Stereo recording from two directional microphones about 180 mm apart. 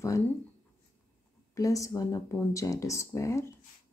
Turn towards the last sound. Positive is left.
turn(degrees=15)  # may be behind; listen again after turning